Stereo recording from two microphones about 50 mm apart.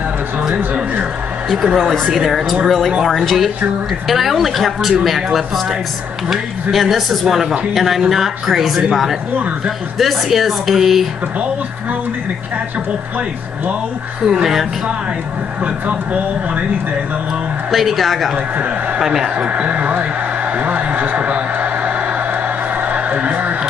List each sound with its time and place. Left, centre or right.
1.5 s speech: centre
14.2 s speech: centre
15.6 s speech: right
17.6 s speech: centre
18.9 s speech: centre
19.5 s speech: right
20.5 s a sound: right
22.9 s music: right